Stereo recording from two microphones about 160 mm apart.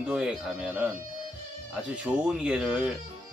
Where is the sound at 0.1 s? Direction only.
5° right (ahead or behind).